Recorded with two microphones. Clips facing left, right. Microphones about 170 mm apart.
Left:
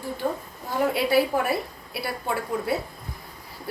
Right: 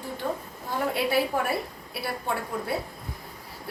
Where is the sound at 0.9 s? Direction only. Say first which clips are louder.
Left 3 dB; centre (ahead or behind).